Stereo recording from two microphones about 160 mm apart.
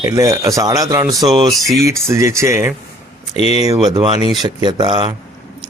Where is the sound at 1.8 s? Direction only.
15° right (ahead or behind).